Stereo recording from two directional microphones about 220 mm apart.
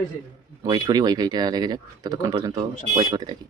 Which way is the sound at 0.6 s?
20° right (ahead or behind).